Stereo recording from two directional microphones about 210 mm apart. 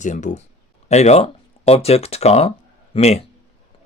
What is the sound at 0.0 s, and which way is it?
A man's voice, 35° left (ahead or behind).